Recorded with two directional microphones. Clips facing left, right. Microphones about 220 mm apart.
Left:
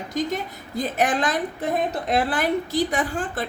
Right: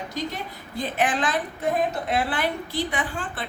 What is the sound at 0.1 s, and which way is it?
A woman's voice, 45° left (ahead or behind).